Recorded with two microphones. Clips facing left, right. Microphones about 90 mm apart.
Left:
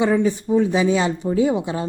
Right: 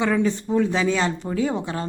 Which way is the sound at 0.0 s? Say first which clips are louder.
Left 3 dB; 15° left (ahead or behind).